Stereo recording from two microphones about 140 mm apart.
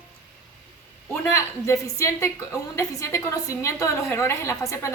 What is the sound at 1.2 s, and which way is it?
A woman's voice, 20° left (ahead or behind).